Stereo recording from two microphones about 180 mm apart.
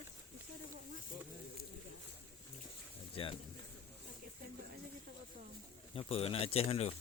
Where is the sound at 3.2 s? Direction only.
30° left (ahead or behind).